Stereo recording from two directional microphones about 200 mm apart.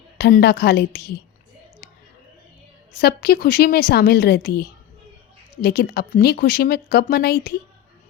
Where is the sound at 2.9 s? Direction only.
50° left (ahead or behind).